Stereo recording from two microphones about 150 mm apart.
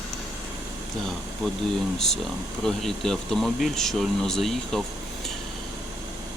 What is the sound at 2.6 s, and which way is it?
Speech, centre (ahead or behind).